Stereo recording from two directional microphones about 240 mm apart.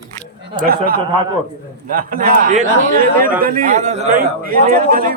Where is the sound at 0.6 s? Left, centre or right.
Right.